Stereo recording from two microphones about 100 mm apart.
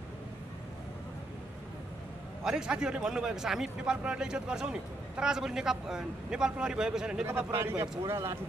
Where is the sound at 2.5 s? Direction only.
10° right (ahead or behind).